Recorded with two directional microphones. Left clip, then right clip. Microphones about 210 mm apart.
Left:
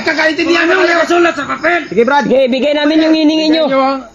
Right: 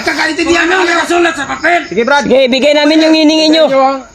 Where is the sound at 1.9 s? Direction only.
50° right (ahead or behind).